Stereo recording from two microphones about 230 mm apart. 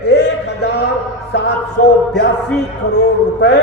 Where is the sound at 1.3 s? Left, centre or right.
Left.